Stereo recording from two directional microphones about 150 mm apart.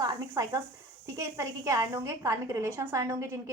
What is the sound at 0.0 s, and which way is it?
A woman's voice, 25° right (ahead or behind).